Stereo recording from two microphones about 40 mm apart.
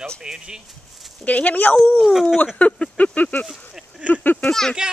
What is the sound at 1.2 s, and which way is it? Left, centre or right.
Speech, left.